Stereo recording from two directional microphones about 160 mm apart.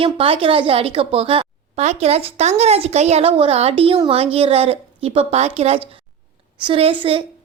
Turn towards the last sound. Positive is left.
turn(degrees=-35)  # may be behind; listen again after turning